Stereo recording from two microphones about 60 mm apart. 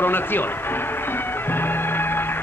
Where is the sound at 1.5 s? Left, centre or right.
Left.